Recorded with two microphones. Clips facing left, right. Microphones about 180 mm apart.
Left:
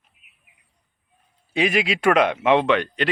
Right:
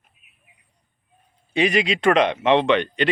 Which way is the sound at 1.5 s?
5° left (ahead or behind).